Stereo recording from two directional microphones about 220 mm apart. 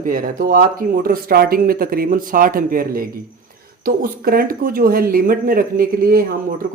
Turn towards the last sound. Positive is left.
turn(degrees=-40)  # may be behind; listen again after turning